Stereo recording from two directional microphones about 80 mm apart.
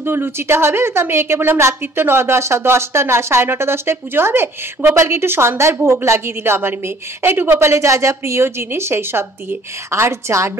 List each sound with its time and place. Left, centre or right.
0.0 s a woman's voice: right